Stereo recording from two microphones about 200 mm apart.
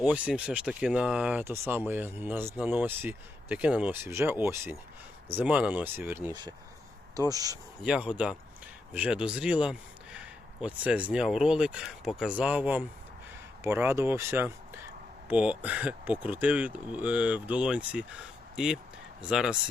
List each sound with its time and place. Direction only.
0.0 s speech: 5° right (ahead or behind)
7.8 s speech: 5° right (ahead or behind)